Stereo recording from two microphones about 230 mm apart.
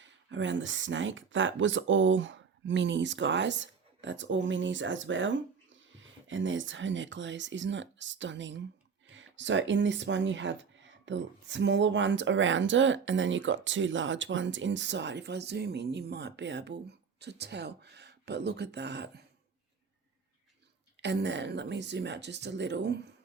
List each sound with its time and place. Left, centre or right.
0.0 s speech: right
21.0 s speech: right